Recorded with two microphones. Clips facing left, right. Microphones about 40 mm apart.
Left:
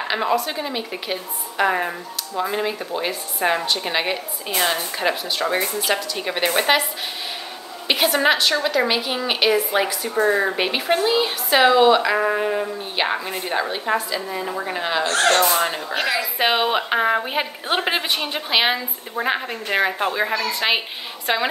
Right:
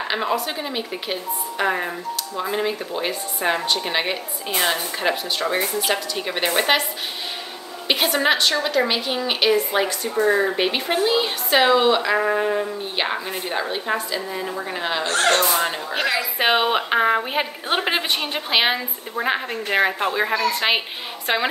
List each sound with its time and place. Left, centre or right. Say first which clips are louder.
0.1 s speech: left 3 dB; centre
7.9 s a woman's voice: left 1 dB; centre